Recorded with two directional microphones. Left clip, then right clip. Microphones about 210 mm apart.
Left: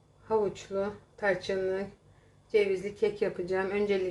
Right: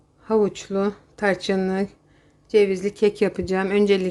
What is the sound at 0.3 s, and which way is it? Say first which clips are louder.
Speech: right 8 dB; 55° right (ahead or behind).